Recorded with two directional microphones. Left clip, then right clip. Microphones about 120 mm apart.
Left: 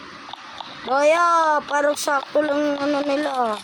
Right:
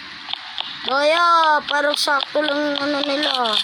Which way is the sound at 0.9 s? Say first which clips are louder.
Even; 15° left (ahead or behind).